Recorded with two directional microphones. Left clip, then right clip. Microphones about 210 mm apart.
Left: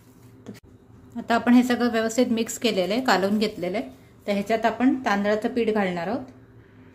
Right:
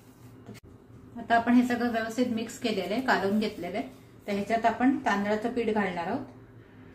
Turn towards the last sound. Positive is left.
turn(degrees=50)  # may be behind; listen again after turning